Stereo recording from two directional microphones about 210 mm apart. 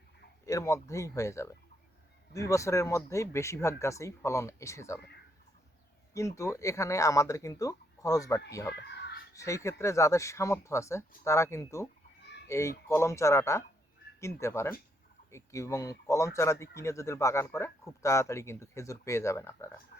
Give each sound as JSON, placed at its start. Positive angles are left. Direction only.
{"t": 0.4, "sound": "speech", "side_deg": 15}
{"t": 6.1, "sound": "speech", "side_deg": 15}
{"t": 8.7, "sound": "a sound", "side_deg": 50}
{"t": 9.3, "sound": "speech", "side_deg": 15}